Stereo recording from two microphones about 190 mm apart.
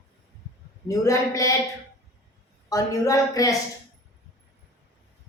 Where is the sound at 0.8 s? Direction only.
15° left (ahead or behind).